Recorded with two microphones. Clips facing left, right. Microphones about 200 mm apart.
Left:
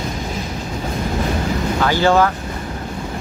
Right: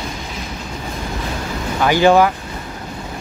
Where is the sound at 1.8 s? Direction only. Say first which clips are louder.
Right 3 dB; 15° right (ahead or behind).